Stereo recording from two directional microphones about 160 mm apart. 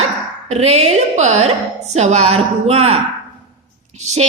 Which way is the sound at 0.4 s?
45° right (ahead or behind).